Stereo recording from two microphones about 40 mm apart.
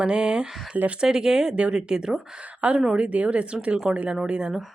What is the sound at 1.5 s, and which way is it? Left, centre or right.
Speech, right.